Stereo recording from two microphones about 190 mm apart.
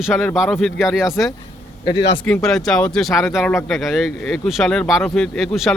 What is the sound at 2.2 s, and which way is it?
Speech, 5° left (ahead or behind).